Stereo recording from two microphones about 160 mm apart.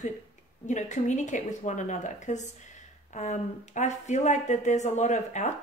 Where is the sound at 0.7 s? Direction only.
45° left (ahead or behind).